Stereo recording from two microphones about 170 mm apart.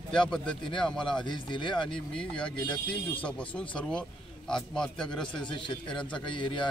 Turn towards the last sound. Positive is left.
turn(degrees=30)  # may be behind; listen again after turning